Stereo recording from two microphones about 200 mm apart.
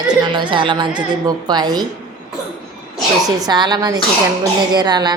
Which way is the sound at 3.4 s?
20° right (ahead or behind).